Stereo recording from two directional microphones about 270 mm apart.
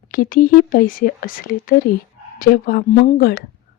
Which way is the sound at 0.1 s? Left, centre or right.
Left.